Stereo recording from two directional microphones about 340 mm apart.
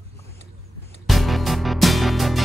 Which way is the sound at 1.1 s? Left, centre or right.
Centre.